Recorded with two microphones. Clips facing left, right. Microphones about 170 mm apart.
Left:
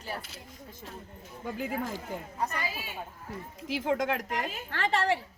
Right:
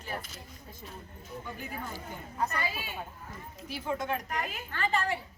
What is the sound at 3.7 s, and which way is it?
A woman's voice, 90° left.